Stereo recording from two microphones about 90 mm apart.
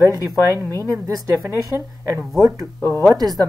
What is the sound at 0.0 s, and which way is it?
Speech, 40° right (ahead or behind).